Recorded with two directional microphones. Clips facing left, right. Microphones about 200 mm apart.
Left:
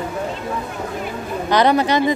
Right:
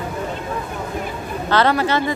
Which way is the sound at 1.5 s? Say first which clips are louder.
Left 2 dB; 15° left (ahead or behind).